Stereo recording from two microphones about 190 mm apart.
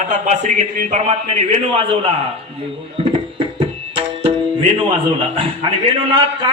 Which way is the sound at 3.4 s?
25° right (ahead or behind).